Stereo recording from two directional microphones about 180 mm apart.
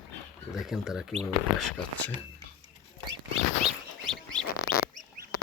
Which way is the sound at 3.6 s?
5° left (ahead or behind).